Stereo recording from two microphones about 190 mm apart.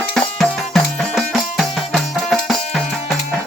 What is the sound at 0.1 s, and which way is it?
Music, 5° left (ahead or behind).